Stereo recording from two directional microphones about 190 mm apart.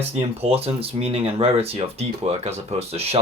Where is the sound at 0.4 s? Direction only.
30° right (ahead or behind).